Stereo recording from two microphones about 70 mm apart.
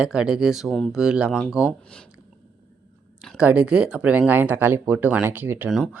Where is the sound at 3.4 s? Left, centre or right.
Centre.